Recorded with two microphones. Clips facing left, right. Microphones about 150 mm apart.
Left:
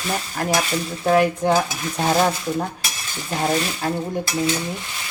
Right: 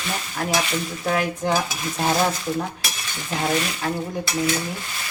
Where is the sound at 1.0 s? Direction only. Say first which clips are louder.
Left 7 dB; 35° left (ahead or behind).